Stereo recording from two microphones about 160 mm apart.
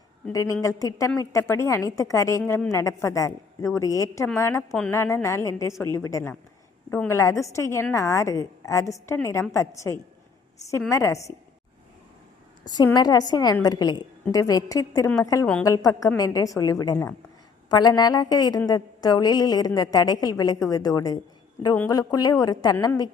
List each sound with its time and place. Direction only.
0.3 s a woman's voice: 20° left (ahead or behind)
12.6 s a woman's voice: 25° left (ahead or behind)